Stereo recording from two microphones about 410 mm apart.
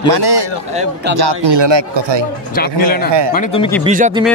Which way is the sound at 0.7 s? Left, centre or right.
Centre.